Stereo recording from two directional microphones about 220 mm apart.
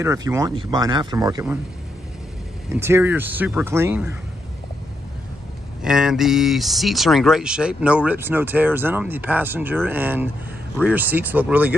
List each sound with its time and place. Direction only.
0.0 s speech: 15° right (ahead or behind)
2.7 s speech: 10° right (ahead or behind)
5.8 s speech: 5° right (ahead or behind)